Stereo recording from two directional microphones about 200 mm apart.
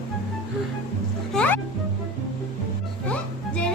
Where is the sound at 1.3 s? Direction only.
10° left (ahead or behind).